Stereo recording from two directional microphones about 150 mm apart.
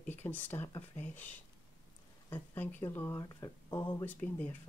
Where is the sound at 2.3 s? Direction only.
15° left (ahead or behind).